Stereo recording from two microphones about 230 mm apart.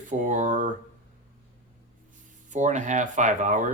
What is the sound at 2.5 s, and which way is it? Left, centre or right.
Speech, right.